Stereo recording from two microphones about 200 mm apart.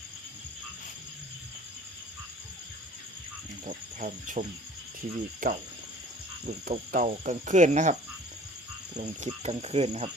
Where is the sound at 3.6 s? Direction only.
40° right (ahead or behind).